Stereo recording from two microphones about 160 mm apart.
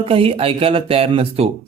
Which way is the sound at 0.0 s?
35° right (ahead or behind).